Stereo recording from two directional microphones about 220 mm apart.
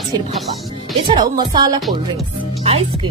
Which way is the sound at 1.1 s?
20° right (ahead or behind).